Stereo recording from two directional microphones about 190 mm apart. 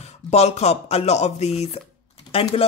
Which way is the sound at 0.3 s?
35° left (ahead or behind).